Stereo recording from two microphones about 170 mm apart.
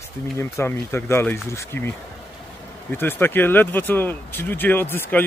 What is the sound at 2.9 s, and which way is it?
Speech, 15° left (ahead or behind).